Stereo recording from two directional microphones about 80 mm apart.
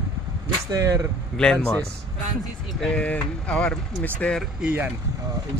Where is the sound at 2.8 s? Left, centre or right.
Centre.